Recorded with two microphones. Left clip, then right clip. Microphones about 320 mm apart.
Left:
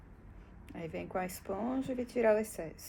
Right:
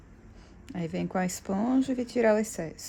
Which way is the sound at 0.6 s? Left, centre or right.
Right.